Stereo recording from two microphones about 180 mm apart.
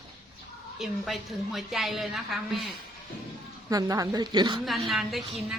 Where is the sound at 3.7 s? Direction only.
20° right (ahead or behind).